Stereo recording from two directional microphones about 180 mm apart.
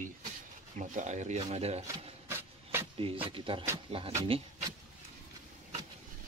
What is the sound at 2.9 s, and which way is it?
Speech, 30° right (ahead or behind).